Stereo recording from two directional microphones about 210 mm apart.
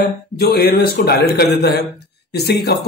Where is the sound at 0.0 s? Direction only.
45° left (ahead or behind).